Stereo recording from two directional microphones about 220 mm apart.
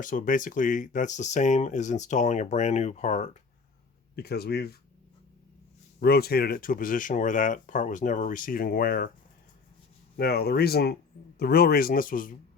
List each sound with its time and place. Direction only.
0.0 s speech: 35° left (ahead or behind)
4.1 s speech: 45° left (ahead or behind)
6.0 s speech: 45° left (ahead or behind)
10.2 s speech: 45° left (ahead or behind)